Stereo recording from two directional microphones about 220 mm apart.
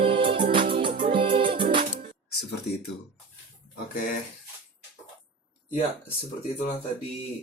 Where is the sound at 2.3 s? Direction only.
45° left (ahead or behind).